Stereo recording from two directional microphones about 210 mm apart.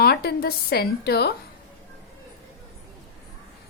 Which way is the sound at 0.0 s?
50° left (ahead or behind).